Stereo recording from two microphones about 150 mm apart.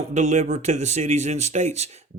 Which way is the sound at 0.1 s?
50° right (ahead or behind).